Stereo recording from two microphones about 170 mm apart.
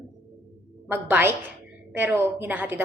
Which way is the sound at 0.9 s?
15° right (ahead or behind).